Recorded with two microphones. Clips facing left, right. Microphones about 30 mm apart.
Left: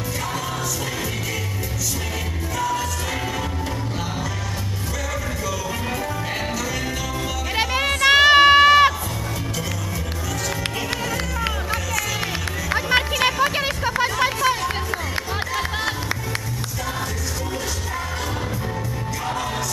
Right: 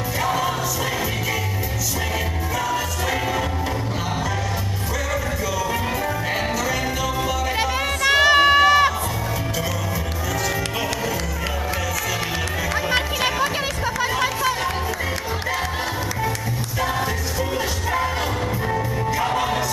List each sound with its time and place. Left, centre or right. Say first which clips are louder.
7.5 s music: left 1 dB; centre
12.7 s music: left 3 dB; centre